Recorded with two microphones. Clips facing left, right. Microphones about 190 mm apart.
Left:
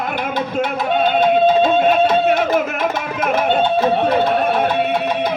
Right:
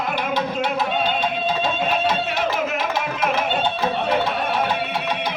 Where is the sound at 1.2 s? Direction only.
55° left (ahead or behind).